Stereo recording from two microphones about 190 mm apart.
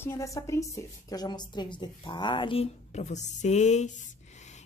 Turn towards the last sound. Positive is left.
turn(degrees=40)  # may be behind; listen again after turning